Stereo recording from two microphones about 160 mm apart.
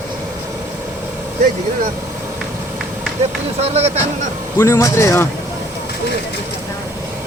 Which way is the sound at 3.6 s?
40° right (ahead or behind).